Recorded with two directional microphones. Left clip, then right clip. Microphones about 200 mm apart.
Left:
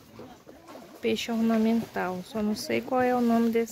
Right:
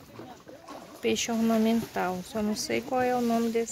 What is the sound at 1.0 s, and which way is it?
Speech, 5° left (ahead or behind).